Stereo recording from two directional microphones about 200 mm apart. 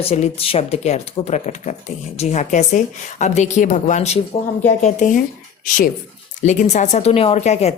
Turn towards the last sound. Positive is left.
turn(degrees=35)  # may be behind; listen again after turning